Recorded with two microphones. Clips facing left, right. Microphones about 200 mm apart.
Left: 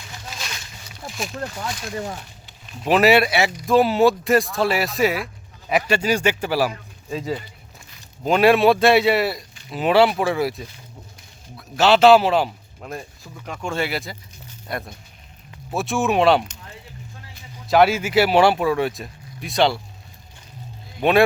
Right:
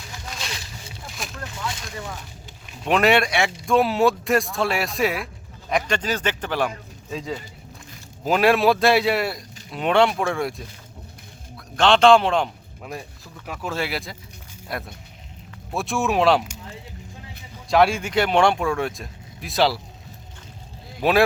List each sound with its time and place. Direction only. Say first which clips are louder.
1.1 s speech: left 6 dB; centre (ahead or behind)
2.8 s speech: left 3 dB; 5° left (ahead or behind)
17.7 s speech: left 2 dB; 5° left (ahead or behind)
21.0 s speech: left 2 dB; centre (ahead or behind)